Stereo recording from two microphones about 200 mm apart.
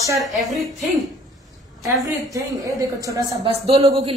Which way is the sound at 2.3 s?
15° right (ahead or behind).